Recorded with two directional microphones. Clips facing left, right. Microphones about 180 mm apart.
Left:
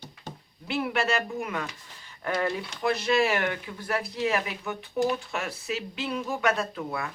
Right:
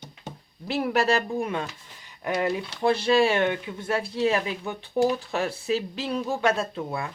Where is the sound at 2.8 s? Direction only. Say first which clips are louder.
Right 4 dB; 30° right (ahead or behind).